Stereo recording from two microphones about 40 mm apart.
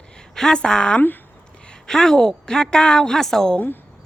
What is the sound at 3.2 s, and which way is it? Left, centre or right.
Speech, centre.